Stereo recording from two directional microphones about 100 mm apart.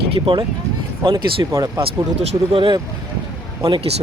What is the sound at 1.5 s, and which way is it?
Speech, 30° right (ahead or behind).